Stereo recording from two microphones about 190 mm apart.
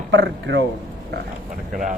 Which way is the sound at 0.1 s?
70° right (ahead or behind).